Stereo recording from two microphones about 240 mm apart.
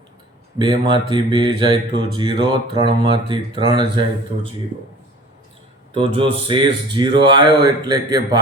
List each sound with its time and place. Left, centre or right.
0.6 s speech: centre
5.9 s speech: right